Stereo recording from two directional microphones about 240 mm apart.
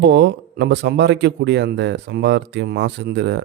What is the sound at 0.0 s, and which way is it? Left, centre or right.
Speech, right.